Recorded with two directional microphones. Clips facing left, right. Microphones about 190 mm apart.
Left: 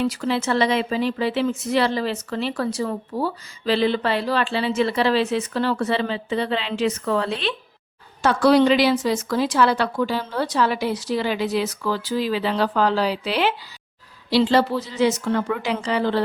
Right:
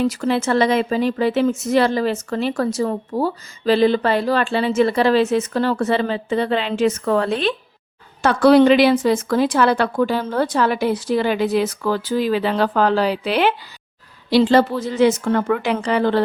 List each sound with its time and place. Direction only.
0.0 s speech: 45° right (ahead or behind)